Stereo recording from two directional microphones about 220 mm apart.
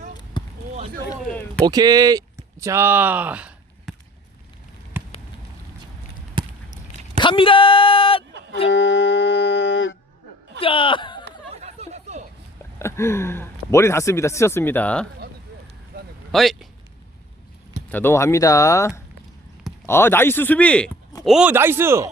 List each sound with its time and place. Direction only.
0.4 s basketball bounce: 20° left (ahead or behind)
1.6 s speech: 15° right (ahead or behind)
4.9 s a sound: 10° right (ahead or behind)
6.4 s basketball bounce: 20° right (ahead or behind)
7.2 s speech: 25° left (ahead or behind)
8.7 s music: 55° left (ahead or behind)
10.6 s speech: 25° left (ahead or behind)
11.6 s chatter: 30° right (ahead or behind)
12.8 s speech: 10° left (ahead or behind)
16.3 s speech: centre (ahead or behind)
17.9 s a man's voice: 10° left (ahead or behind)
21.2 s a man's voice: 5° right (ahead or behind)